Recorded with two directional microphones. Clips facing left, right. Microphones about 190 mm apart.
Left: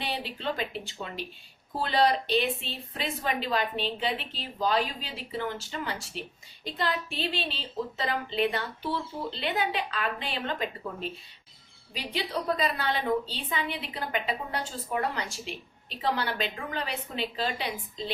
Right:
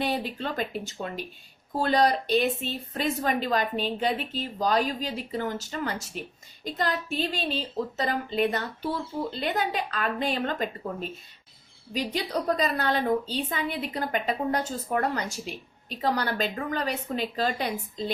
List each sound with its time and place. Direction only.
0.0 s a woman's voice: 45° right (ahead or behind)